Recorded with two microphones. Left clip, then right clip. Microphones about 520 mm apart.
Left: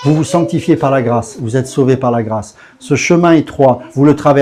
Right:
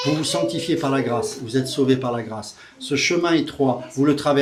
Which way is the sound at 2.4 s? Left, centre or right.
Left.